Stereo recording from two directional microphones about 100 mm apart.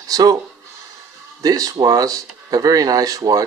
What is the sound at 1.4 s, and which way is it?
Speech, 35° right (ahead or behind).